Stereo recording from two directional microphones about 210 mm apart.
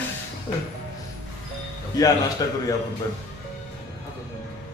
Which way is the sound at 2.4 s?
15° left (ahead or behind).